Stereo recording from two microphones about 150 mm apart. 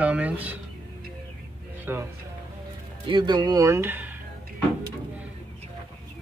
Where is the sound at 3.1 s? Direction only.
30° right (ahead or behind); by 4.1 s 15° right (ahead or behind).